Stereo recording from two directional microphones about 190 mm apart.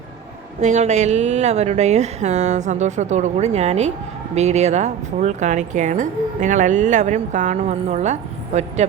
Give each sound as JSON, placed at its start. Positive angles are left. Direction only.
{"t": 0.6, "sound": "speech", "side_deg": -40}